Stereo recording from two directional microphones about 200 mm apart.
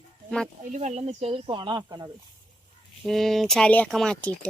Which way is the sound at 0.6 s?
35° right (ahead or behind).